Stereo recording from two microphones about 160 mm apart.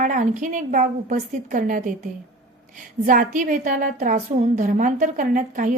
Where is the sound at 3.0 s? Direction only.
60° right (ahead or behind).